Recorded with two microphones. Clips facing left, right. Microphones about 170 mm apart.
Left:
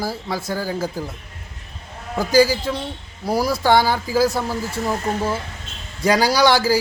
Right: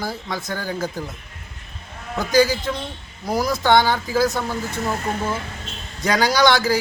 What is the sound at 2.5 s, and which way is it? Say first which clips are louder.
Speech: left 2 dB; 10° left (ahead or behind).